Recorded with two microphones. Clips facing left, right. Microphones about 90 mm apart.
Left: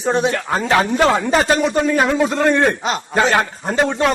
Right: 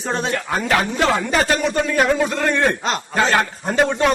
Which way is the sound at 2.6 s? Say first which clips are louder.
Left 2 dB; 5° left (ahead or behind).